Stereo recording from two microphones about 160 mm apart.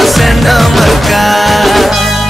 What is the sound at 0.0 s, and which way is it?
Music, centre (ahead or behind).